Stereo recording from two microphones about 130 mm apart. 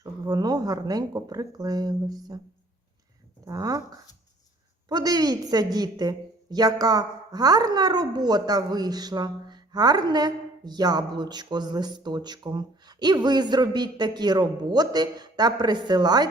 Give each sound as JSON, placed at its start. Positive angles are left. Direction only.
{"t": 0.0, "sound": "speech", "side_deg": -30}
{"t": 3.4, "sound": "speech", "side_deg": -30}
{"t": 4.9, "sound": "a woman's voice", "side_deg": -30}